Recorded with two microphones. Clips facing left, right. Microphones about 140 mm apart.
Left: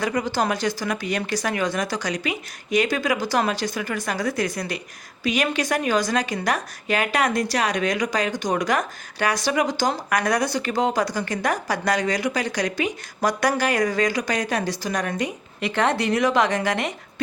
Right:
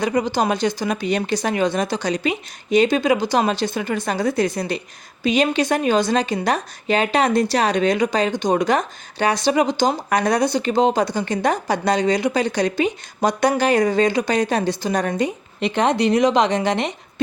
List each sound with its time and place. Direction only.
0.0 s a woman's voice: 20° right (ahead or behind)